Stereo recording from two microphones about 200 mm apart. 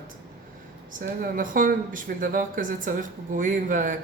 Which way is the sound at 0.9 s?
40° right (ahead or behind).